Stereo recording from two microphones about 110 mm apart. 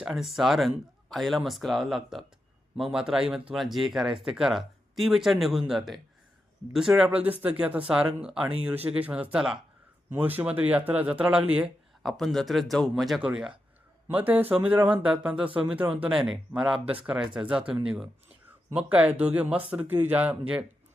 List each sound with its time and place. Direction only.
0.0 s speech: 5° right (ahead or behind)
12.0 s speech: centre (ahead or behind)
13.2 s speech: 10° right (ahead or behind)